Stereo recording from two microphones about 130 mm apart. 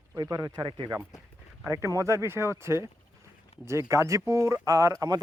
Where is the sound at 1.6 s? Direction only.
25° right (ahead or behind).